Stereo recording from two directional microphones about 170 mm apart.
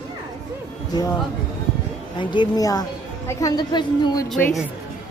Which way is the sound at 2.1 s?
25° left (ahead or behind).